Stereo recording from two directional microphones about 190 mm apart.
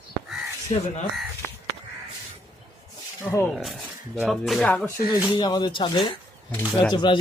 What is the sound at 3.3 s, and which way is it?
Speech, 10° left (ahead or behind).